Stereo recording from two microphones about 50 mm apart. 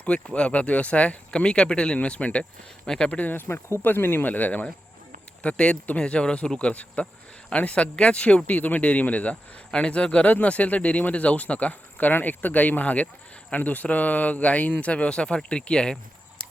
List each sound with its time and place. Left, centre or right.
0.3 s speech: left
3.1 s speech: left
3.4 s speech: left
3.8 s speech: left
4.3 s speech: left